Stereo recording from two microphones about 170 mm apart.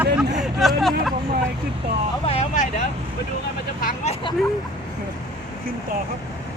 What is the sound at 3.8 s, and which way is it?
Hubbub, 40° left (ahead or behind).